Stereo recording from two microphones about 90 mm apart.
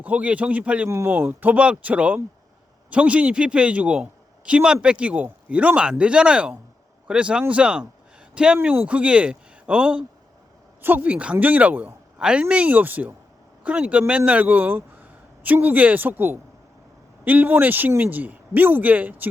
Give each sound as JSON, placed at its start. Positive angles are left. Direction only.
{"t": 0.0, "sound": "a man's voice", "side_deg": -15}
{"t": 0.9, "sound": "a man's voice", "side_deg": -30}